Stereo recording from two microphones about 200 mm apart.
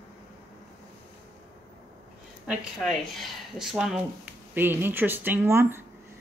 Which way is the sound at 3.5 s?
5° right (ahead or behind).